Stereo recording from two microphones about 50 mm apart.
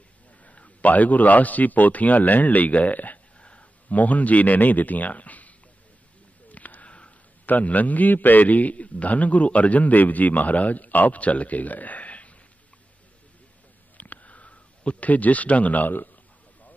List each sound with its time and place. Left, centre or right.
0.5 s a man's voice: left
3.3 s speech: left
6.5 s a man's voice: left
13.9 s a sound: left